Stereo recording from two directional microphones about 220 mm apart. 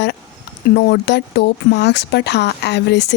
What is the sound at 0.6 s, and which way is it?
Speech, 50° left (ahead or behind).